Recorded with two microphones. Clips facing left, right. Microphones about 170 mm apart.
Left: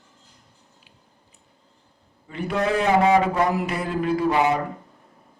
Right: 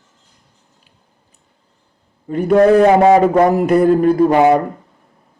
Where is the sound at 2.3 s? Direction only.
50° right (ahead or behind).